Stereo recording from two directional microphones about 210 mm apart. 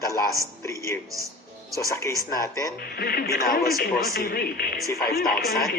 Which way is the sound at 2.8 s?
50° left (ahead or behind).